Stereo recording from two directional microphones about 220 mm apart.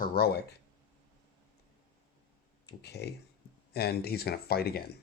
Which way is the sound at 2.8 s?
50° left (ahead or behind).